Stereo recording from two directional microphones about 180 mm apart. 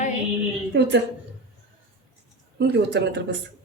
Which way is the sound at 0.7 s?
85° right.